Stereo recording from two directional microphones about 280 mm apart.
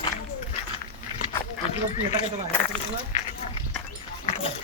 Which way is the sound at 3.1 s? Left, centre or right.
Left.